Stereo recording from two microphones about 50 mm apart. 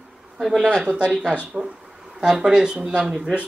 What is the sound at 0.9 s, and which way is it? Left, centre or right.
Speech, right.